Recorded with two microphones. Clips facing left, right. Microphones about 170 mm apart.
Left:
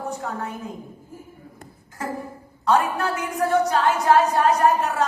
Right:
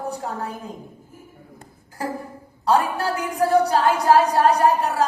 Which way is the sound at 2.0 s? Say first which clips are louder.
Right 1 dB; 35° right (ahead or behind).